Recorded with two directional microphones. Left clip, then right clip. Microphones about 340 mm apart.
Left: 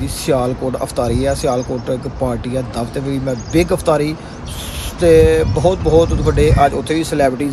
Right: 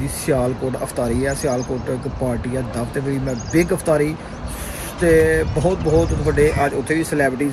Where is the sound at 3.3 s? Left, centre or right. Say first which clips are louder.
Left 4 dB; centre.